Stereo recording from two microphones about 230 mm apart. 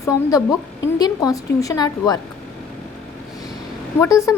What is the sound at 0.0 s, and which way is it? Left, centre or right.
Speech, centre.